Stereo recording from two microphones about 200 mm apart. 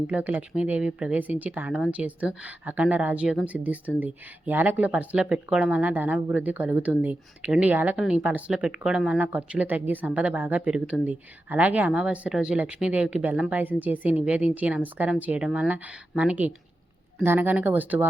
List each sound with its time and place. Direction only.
0.1 s speech: 5° right (ahead or behind)